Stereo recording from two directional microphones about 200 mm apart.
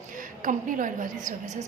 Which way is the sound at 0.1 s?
40° right (ahead or behind).